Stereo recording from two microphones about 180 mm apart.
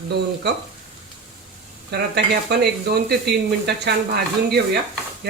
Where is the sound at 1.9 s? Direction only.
65° right (ahead or behind).